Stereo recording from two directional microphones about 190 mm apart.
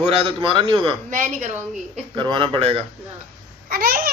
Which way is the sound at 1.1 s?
40° right (ahead or behind).